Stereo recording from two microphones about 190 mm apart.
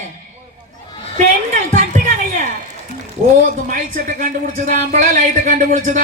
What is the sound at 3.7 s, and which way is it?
Speech, 45° right (ahead or behind).